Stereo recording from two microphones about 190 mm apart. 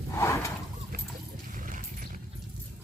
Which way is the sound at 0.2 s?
15° left (ahead or behind).